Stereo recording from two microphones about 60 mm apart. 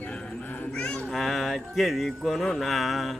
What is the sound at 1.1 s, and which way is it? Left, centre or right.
Speech, centre.